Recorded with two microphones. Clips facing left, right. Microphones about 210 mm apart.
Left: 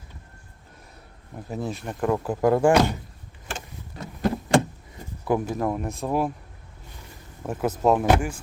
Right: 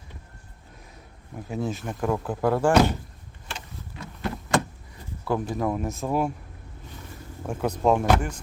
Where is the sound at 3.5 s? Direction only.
45° left (ahead or behind).